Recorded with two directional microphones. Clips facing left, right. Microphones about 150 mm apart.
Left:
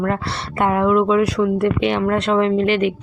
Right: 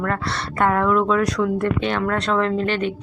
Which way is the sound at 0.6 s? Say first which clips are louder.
Left 2 dB; 10° left (ahead or behind).